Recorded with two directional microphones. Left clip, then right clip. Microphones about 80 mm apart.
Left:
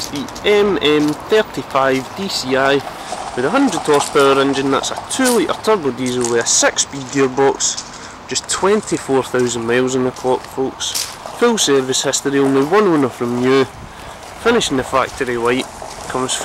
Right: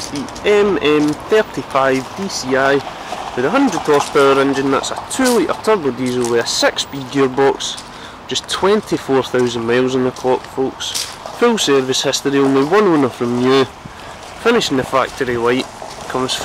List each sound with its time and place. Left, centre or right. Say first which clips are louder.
0.1 s speech: right 1 dB; centre
2.2 s speech: left 2 dB; left
2.5 s speech: right 1 dB; centre
3.3 s speech: right 1 dB; centre
6.6 s speech: even; centre
14.4 s speech: right 1 dB; centre